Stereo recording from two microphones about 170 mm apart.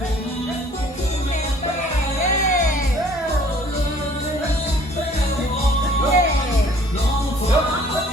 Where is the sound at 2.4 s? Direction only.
50° left (ahead or behind).